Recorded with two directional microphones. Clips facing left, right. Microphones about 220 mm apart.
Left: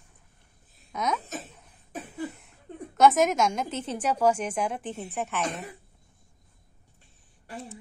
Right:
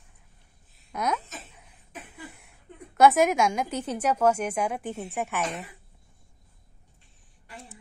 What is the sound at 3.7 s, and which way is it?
Speech, 25° left (ahead or behind).